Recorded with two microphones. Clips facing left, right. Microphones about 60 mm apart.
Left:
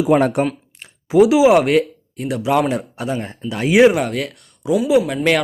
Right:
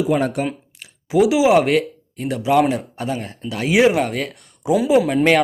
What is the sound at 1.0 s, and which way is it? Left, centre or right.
Speech, left.